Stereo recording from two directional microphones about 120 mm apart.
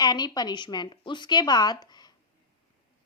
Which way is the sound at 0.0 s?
35° left (ahead or behind).